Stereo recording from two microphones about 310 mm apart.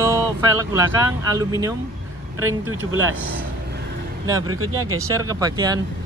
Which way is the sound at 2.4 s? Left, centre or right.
Right.